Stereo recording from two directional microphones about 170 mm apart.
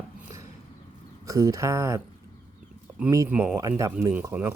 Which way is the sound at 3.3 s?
10° right (ahead or behind).